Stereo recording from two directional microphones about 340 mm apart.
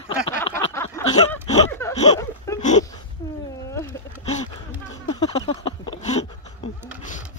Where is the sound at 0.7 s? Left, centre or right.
Centre.